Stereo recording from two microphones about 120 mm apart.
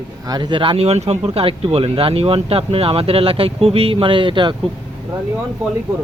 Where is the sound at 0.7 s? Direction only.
60° right (ahead or behind); by 4.6 s 40° right (ahead or behind).